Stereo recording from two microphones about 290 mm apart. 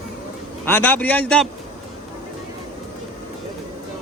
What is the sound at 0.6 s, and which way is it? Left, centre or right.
Speech, centre.